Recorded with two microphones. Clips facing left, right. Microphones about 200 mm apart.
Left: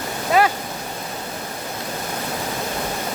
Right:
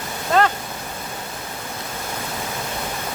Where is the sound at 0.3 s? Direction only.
10° left (ahead or behind).